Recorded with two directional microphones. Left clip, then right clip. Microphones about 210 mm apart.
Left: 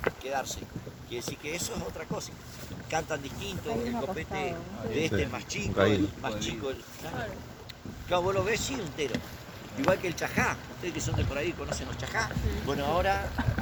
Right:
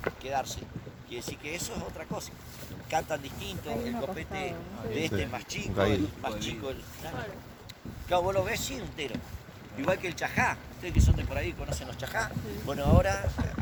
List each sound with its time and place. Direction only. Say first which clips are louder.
0.3 s speech: even; 45° right (ahead or behind)